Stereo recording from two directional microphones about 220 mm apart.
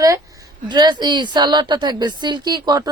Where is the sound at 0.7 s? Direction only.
20° right (ahead or behind).